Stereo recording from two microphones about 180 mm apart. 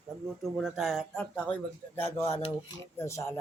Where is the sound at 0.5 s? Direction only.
Centre (ahead or behind).